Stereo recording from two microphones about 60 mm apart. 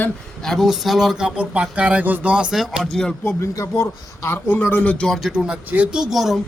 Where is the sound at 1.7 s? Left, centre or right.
Right.